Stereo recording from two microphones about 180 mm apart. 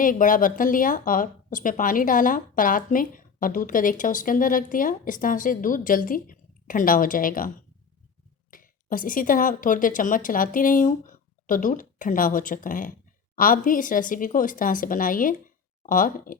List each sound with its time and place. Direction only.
0.0 s speech: 50° left (ahead or behind)